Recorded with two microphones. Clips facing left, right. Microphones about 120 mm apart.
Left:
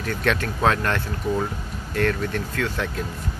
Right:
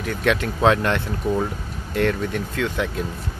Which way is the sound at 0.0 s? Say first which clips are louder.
Right 2 dB; 15° right (ahead or behind).